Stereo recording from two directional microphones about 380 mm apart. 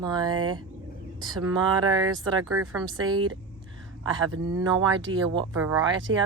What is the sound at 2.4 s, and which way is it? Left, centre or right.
Speech, right.